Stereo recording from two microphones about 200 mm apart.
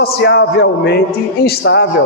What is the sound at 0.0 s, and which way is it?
A man's voice, 55° left (ahead or behind).